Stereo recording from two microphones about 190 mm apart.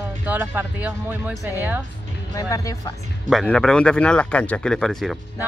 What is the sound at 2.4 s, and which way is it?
Speech, 15° left (ahead or behind).